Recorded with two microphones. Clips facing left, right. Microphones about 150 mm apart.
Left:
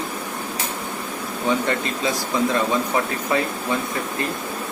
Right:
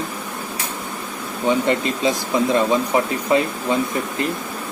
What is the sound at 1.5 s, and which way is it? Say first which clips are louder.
A man's voice: right 4 dB; 20° right (ahead or behind).